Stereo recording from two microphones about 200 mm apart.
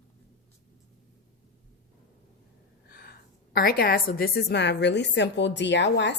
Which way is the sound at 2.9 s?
50° left (ahead or behind).